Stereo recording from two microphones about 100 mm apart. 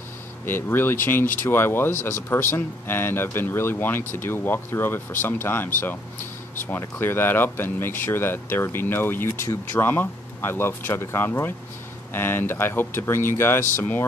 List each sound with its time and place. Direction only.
0.5 s speech: 20° left (ahead or behind)